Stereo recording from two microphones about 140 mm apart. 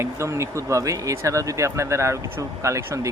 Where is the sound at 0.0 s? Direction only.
20° right (ahead or behind).